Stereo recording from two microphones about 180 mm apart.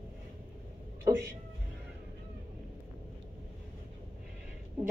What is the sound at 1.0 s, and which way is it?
Music, 15° right (ahead or behind).